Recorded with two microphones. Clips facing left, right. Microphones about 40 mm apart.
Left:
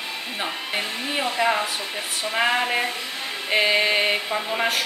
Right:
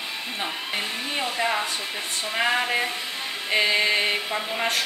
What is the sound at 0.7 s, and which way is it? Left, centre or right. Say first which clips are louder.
Speech: left 3 dB; centre.